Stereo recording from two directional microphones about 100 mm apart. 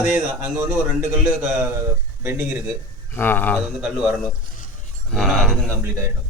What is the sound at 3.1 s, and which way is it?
Speech, 20° left (ahead or behind).